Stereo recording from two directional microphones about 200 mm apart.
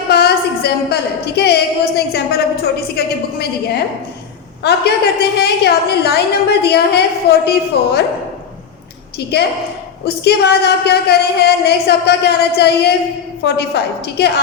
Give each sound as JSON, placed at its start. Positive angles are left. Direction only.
{"t": 0.1, "sound": "a sound", "side_deg": 55}
{"t": 2.9, "sound": "a woman's voice", "side_deg": 50}
{"t": 4.6, "sound": "a woman's voice", "side_deg": 55}
{"t": 10.2, "sound": "speech", "side_deg": 55}